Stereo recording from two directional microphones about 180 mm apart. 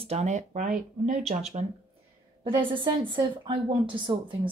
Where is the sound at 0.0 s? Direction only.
35° right (ahead or behind).